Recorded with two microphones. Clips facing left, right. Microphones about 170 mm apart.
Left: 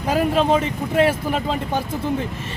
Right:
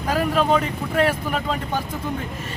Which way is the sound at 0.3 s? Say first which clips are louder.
Left 2 dB; 25° left (ahead or behind).